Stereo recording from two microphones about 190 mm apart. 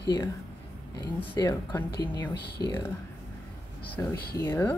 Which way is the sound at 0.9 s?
20° left (ahead or behind).